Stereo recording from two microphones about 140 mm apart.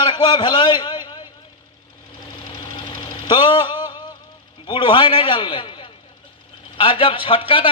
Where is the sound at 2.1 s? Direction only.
30° left (ahead or behind).